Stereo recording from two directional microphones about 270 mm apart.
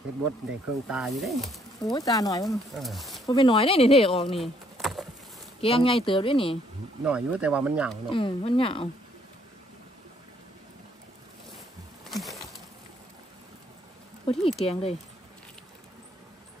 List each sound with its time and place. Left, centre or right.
0.8 s speech: centre
2.0 s speech: centre
2.4 s speech: centre
3.3 s speech: centre
4.4 s a sound: centre
5.6 s speech: left
7.1 s speech: centre
8.1 s speech: centre
12.1 s bee: centre
14.2 s speech: left